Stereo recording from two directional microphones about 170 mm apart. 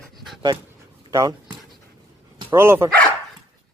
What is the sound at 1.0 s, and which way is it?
Speech, 20° right (ahead or behind).